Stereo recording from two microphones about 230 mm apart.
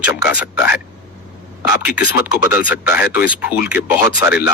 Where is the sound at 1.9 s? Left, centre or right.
Centre.